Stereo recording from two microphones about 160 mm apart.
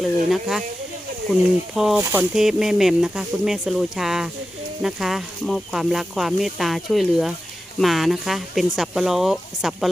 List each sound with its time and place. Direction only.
0.0 s speech: centre (ahead or behind)
2.0 s speech: 15° right (ahead or behind)
2.3 s speech: centre (ahead or behind)